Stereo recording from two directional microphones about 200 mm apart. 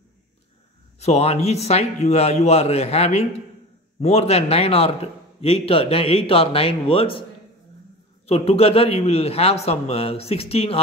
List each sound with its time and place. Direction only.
1.0 s a man's voice: 35° left (ahead or behind)
8.3 s a man's voice: 30° left (ahead or behind)